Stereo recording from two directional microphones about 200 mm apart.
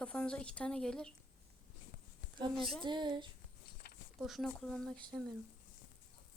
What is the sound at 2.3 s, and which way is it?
Speech, 25° right (ahead or behind).